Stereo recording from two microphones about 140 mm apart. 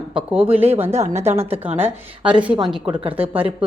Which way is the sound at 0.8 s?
50° right (ahead or behind).